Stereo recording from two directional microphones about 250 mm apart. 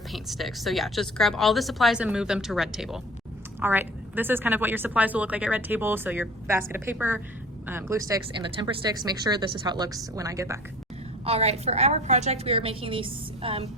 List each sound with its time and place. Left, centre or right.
0.1 s a woman's voice: centre
11.3 s a woman's voice: right